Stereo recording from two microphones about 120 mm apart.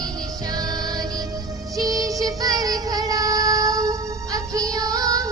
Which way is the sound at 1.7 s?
30° right (ahead or behind).